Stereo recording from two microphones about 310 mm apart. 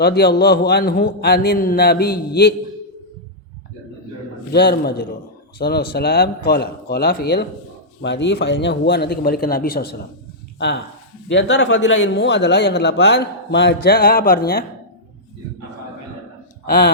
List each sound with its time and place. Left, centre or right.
0.0 s speech: left
4.5 s a man's voice: left
11.3 s speech: left
16.6 s a man's voice: left